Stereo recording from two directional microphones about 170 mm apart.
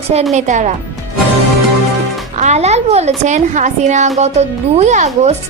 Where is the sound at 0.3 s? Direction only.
45° right (ahead or behind).